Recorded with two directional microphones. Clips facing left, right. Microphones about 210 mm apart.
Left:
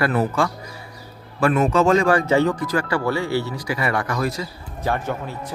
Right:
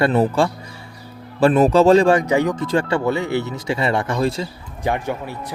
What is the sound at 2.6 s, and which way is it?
Speech, 25° right (ahead or behind).